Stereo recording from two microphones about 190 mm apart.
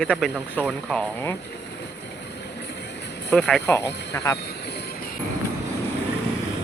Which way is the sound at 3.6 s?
15° left (ahead or behind).